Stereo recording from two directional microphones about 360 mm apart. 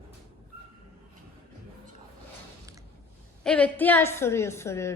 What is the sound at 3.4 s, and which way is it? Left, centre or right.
A woman's voice, centre.